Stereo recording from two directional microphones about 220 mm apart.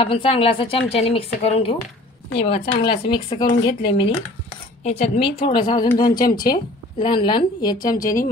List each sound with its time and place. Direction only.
0.0 s dishes: 25° left (ahead or behind)
2.6 s speech: 50° left (ahead or behind)
2.9 s dishes: 20° left (ahead or behind)
6.1 s speech: 40° left (ahead or behind)
6.5 s dishes: 20° left (ahead or behind)